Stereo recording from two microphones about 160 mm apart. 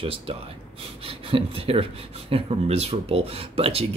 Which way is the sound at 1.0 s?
35° right (ahead or behind).